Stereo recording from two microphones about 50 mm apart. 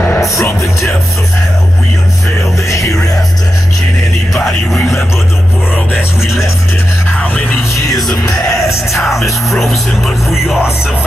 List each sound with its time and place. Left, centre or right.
0.2 s music: left
8.3 s music: left
9.2 s music: centre
10.3 s music: centre